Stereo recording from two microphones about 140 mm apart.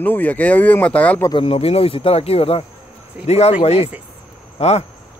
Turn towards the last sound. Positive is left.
turn(degrees=50)  # may be behind; listen again after turning